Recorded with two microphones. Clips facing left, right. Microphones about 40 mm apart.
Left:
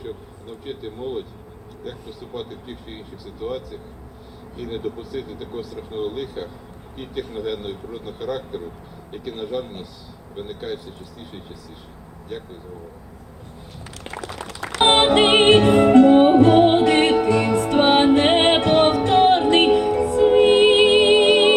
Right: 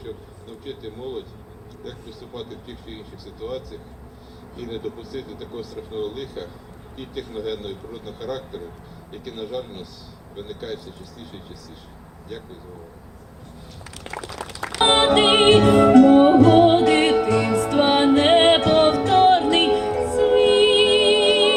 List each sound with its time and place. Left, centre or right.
0.0 s vehicle: centre
1.8 s speech: centre
14.8 s music: left